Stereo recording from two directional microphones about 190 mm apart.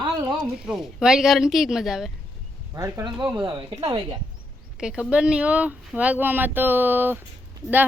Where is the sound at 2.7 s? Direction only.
15° right (ahead or behind).